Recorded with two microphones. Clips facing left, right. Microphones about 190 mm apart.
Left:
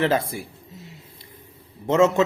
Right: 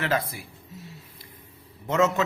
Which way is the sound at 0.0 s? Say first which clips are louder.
Left 5 dB; 25° left (ahead or behind).